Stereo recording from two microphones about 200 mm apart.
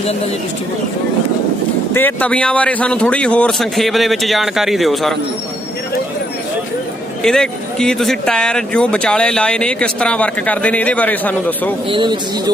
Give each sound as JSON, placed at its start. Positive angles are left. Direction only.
{"t": 1.9, "sound": "speech", "side_deg": 10}
{"t": 7.2, "sound": "speech", "side_deg": 5}
{"t": 11.9, "sound": "speech", "side_deg": -25}